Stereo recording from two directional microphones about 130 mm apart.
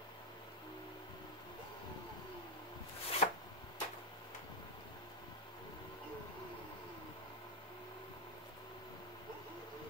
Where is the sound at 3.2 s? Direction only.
75° left (ahead or behind).